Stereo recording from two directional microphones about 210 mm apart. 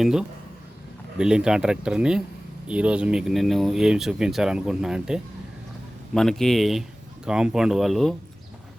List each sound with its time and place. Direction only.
0.0 s speech: 5° right (ahead or behind)